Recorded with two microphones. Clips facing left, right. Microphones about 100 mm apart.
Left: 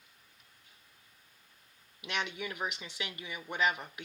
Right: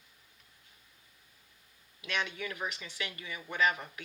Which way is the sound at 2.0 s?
20° left (ahead or behind).